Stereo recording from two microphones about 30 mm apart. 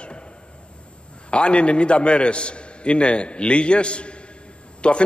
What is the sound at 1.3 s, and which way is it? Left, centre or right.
A man's voice, left.